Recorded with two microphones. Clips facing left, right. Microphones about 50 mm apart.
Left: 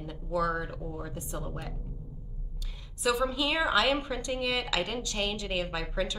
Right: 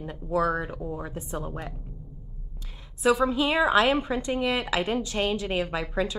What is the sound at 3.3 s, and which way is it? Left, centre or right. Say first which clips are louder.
A woman's voice: right 5 dB; right.